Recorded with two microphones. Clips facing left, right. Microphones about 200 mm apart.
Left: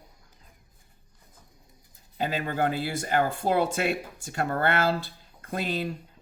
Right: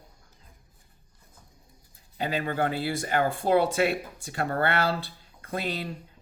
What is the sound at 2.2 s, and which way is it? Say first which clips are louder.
Speech: even; 45° left (ahead or behind).